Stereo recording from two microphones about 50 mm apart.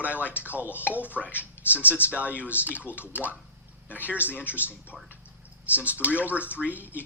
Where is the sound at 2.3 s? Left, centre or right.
Left.